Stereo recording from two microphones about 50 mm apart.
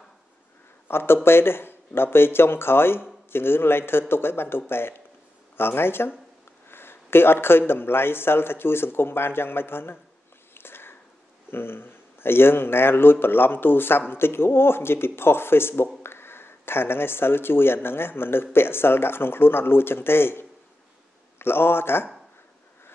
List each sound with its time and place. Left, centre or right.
0.8 s speech: left
10.5 s a sound: left
11.5 s speech: left